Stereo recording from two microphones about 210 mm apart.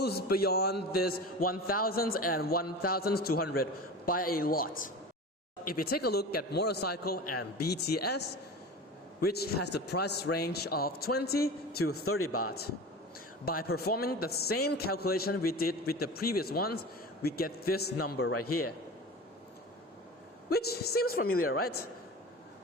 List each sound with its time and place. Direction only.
0.0 s a man's voice: 50° left (ahead or behind)
9.2 s a man's voice: 50° left (ahead or behind)
11.8 s speech: 90° left
13.4 s a man's voice: 45° left (ahead or behind)
18.3 s speech: 90° left
20.5 s a man's voice: 50° left (ahead or behind)
21.2 s speech: 90° left
21.5 s a man's voice: 45° left (ahead or behind)